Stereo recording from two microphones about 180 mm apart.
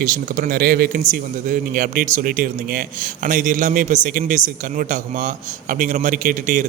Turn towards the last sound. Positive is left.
turn(degrees=-50)  # may be behind; listen again after turning